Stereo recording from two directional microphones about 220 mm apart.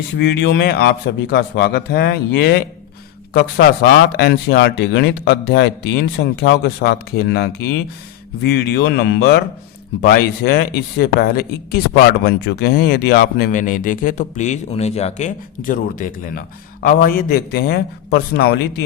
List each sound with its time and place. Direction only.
0.2 s speech: 50° left (ahead or behind)
4.2 s speech: 50° left (ahead or behind)